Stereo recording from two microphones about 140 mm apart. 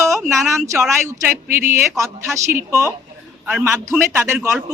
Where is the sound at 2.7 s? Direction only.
20° right (ahead or behind).